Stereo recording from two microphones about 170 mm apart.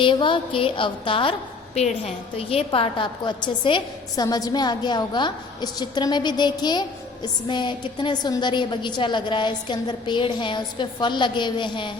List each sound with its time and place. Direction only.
0.0 s a woman's voice: 30° left (ahead or behind)